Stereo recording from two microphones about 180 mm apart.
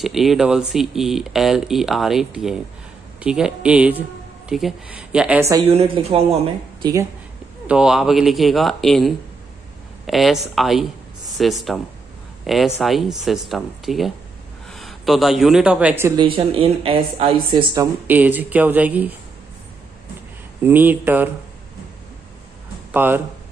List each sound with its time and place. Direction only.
0.0 s speech: centre (ahead or behind)
5.7 s speech: 35° right (ahead or behind)
7.6 s a man's voice: 5° right (ahead or behind)
16.2 s speech: 30° right (ahead or behind)
18.0 s speech: 10° right (ahead or behind)
20.6 s speech: 10° right (ahead or behind)
22.8 s speech: 10° right (ahead or behind)